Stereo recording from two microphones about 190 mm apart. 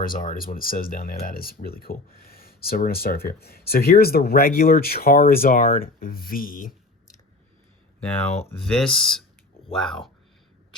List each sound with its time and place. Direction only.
0.0 s speech: 45° left (ahead or behind)
8.4 s speech: 5° left (ahead or behind)